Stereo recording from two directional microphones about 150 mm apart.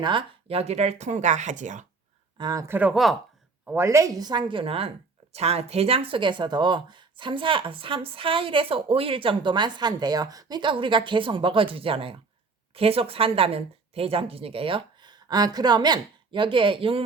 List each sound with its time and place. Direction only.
0.0 s speech: 35° right (ahead or behind); by 1.9 s 55° right (ahead or behind)
2.4 s speech: 25° right (ahead or behind); by 3.2 s centre (ahead or behind)
3.7 s a woman's voice: 20° right (ahead or behind); by 17.0 s 35° right (ahead or behind)